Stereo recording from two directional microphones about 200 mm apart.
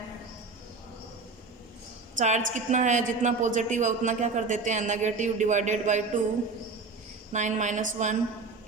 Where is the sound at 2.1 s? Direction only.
40° right (ahead or behind).